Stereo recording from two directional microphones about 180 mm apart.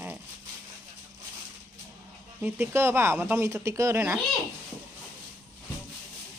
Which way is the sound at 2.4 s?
15° right (ahead or behind).